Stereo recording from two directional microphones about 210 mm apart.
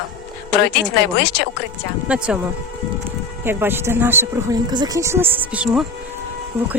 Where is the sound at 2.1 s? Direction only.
5° right (ahead or behind).